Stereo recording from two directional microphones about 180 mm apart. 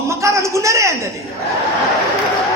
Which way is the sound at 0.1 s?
15° right (ahead or behind).